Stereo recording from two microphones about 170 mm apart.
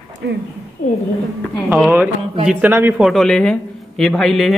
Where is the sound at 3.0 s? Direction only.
Centre (ahead or behind).